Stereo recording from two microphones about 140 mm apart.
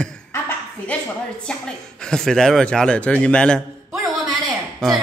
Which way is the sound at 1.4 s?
5° left (ahead or behind).